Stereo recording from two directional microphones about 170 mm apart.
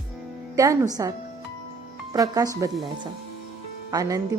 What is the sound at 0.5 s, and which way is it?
Speech, 20° right (ahead or behind).